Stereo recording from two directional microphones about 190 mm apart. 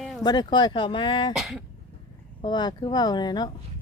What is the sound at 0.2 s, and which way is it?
Speech, 20° left (ahead or behind).